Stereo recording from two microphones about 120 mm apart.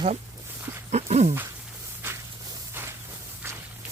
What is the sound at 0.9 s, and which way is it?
Speech, 65° right (ahead or behind).